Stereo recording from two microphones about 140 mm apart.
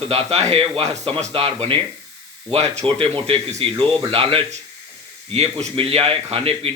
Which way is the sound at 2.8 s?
40° right (ahead or behind).